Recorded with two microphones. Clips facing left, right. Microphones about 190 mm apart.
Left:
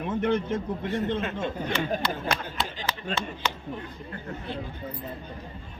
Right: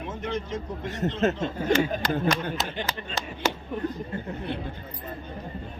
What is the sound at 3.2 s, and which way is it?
Speech, 40° right (ahead or behind).